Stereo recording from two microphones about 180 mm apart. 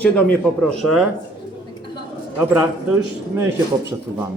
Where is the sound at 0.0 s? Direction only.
10° left (ahead or behind).